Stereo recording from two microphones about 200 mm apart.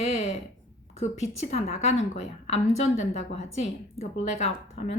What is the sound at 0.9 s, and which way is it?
A woman's voice, 35° left (ahead or behind).